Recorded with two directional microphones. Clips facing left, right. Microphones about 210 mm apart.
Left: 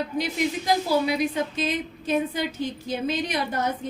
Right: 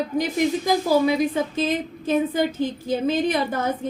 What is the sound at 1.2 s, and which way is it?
A woman's voice, 50° right (ahead or behind).